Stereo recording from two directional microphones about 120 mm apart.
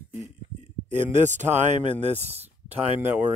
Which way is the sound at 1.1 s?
85° right.